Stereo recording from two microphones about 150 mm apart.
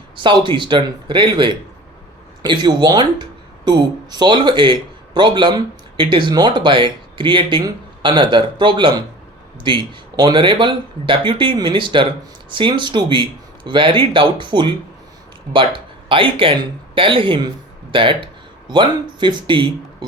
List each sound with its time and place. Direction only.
0.2 s speech: 30° right (ahead or behind)